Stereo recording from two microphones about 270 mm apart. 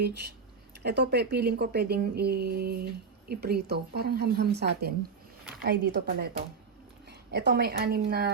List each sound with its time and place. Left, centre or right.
0.0 s a woman's voice: right